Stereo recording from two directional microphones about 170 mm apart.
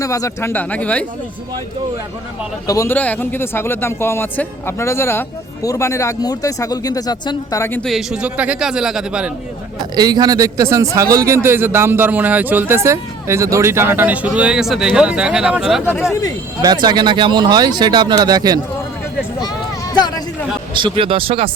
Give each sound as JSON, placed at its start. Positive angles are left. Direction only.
{"t": 0.0, "sound": "speech", "side_deg": 20}
{"t": 2.6, "sound": "speech", "side_deg": 15}
{"t": 7.9, "sound": "a man's voice", "side_deg": -5}
{"t": 9.9, "sound": "speech", "side_deg": -25}
{"t": 15.8, "sound": "speech", "side_deg": 15}
{"t": 16.6, "sound": "speech", "side_deg": -25}
{"t": 19.9, "sound": "a sound", "side_deg": 25}
{"t": 20.7, "sound": "speech", "side_deg": -30}